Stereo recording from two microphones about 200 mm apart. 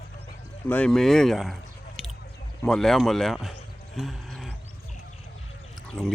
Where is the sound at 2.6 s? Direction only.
Centre (ahead or behind).